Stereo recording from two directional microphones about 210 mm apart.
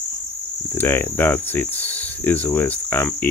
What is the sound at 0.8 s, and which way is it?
Speech, 10° left (ahead or behind).